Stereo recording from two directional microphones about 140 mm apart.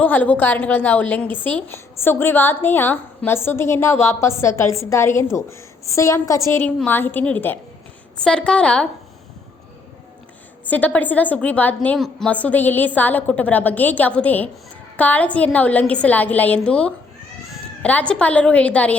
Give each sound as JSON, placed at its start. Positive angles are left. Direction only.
{"t": 0.0, "sound": "a woman's voice", "side_deg": 10}
{"t": 10.7, "sound": "a woman's voice", "side_deg": 10}